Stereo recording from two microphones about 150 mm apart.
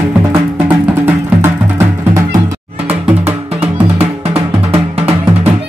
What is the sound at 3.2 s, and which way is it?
Music, 15° right (ahead or behind).